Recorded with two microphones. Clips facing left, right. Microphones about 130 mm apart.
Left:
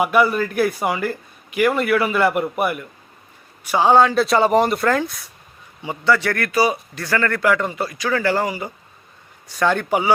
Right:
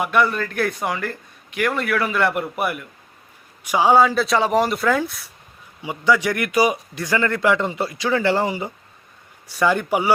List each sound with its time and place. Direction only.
0.0 s a man's voice: 5° left (ahead or behind)
3.6 s a man's voice: 10° right (ahead or behind)
9.5 s a man's voice: 10° right (ahead or behind)